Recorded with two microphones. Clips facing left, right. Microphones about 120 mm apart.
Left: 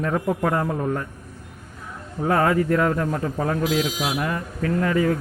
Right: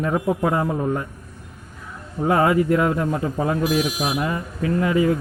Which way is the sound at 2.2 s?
10° right (ahead or behind).